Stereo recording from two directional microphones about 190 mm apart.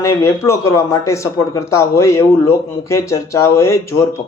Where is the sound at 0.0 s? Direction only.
15° left (ahead or behind).